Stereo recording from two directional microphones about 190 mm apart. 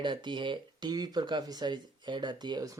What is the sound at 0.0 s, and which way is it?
Speech, 25° right (ahead or behind).